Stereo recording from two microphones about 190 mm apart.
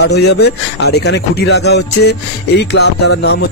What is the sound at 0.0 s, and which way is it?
Speech, 60° left (ahead or behind).